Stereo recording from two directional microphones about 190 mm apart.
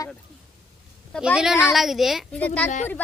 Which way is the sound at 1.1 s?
5° right (ahead or behind).